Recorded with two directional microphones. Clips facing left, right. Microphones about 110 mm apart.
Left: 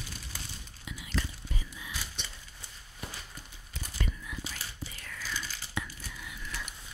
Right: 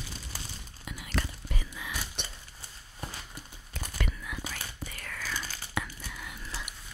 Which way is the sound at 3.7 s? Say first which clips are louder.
Right 2 dB; 65° right (ahead or behind).